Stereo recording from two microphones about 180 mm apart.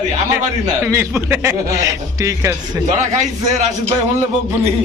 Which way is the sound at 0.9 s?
15° right (ahead or behind).